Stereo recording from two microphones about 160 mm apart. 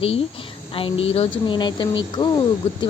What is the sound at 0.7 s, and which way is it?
A woman's voice, 35° left (ahead or behind).